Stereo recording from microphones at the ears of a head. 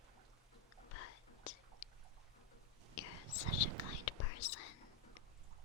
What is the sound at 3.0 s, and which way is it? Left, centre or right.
Whispering, left.